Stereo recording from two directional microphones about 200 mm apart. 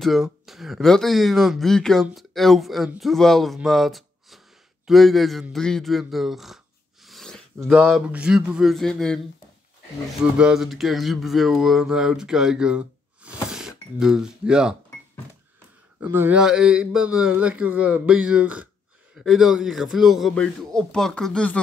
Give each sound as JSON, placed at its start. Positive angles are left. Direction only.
{"t": 0.0, "sound": "a man's voice", "side_deg": 0}
{"t": 10.3, "sound": "speech", "side_deg": -5}
{"t": 16.0, "sound": "speech", "side_deg": -10}